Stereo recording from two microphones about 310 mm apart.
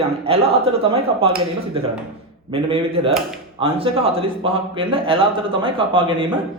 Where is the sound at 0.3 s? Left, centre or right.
Centre.